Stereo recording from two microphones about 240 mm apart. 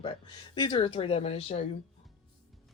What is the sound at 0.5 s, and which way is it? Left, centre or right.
Speech, left.